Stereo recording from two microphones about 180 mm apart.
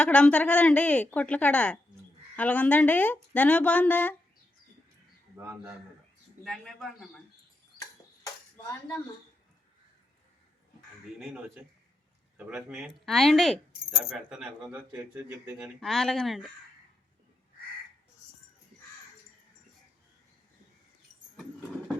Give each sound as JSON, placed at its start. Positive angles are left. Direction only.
{"t": 0.0, "sound": "a woman's voice", "side_deg": 5}
{"t": 5.4, "sound": "speech", "side_deg": -15}
{"t": 6.4, "sound": "a man's voice", "side_deg": 0}
{"t": 11.2, "sound": "a man's voice", "side_deg": 0}
{"t": 15.8, "sound": "a man's voice", "side_deg": 0}